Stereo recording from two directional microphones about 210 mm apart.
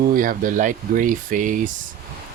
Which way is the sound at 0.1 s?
40° right (ahead or behind).